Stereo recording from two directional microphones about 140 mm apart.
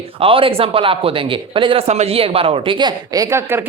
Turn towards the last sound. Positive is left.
turn(degrees=-15)  # may be behind; listen again after turning